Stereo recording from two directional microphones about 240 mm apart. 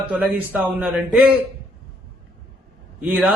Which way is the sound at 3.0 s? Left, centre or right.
Centre.